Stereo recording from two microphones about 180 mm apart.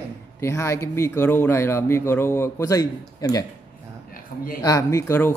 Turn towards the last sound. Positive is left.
turn(degrees=15)  # may be behind; listen again after turning